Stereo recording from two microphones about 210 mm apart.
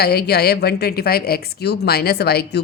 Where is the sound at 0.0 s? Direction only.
50° left (ahead or behind).